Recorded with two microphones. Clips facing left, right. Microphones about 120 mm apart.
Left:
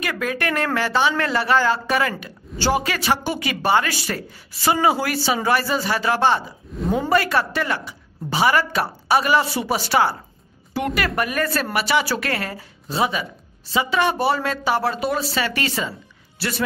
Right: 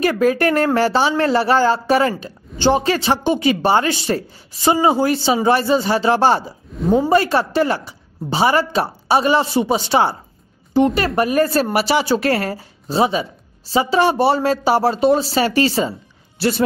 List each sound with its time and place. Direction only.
0.0 s speech: 35° right (ahead or behind)
6.8 s a woman's voice: centre (ahead or behind)
7.1 s speech: 30° right (ahead or behind)